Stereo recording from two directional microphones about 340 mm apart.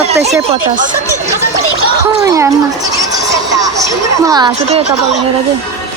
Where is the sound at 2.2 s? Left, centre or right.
Centre.